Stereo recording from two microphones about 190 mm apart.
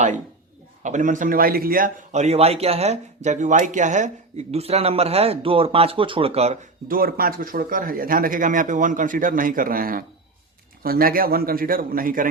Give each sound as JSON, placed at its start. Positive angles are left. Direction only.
{"t": 0.8, "sound": "a man's voice", "side_deg": -40}
{"t": 6.8, "sound": "speech", "side_deg": -50}